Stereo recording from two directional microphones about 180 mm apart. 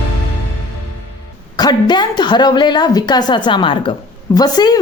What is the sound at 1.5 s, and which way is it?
A woman's voice, 25° left (ahead or behind).